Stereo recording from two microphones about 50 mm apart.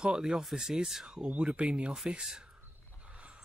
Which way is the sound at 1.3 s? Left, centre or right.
Right.